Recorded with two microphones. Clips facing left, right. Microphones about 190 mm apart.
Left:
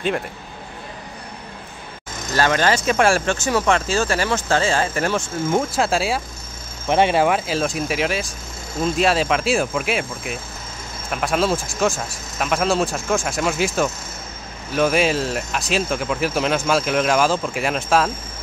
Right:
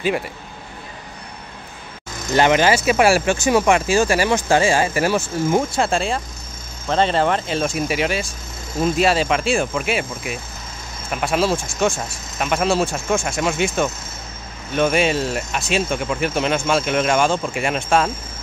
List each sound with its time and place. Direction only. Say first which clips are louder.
2.3 s speech: right 3 dB; 20° right (ahead or behind); by 18.1 s centre (ahead or behind)